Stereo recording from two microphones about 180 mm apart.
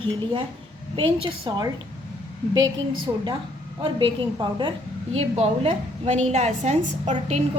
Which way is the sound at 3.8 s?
25° right (ahead or behind).